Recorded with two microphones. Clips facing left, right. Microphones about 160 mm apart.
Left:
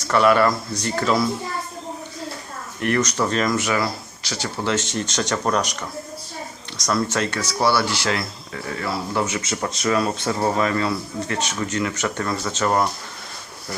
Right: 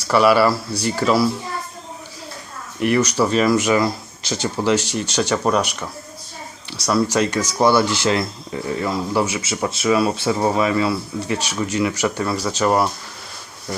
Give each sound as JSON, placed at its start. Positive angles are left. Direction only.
{"t": 0.1, "sound": "speech", "side_deg": -5}
{"t": 0.5, "sound": "speech", "side_deg": -30}
{"t": 0.9, "sound": "a child's voice", "side_deg": -5}
{"t": 2.8, "sound": "speech", "side_deg": -10}
{"t": 6.8, "sound": "speech", "side_deg": -10}